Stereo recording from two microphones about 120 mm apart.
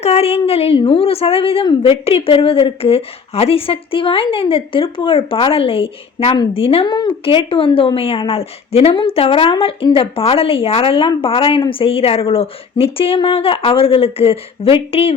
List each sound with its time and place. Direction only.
0.0 s a woman's voice: 60° left (ahead or behind)
6.8 s a woman's voice: 40° left (ahead or behind); by 15.1 s 55° left (ahead or behind)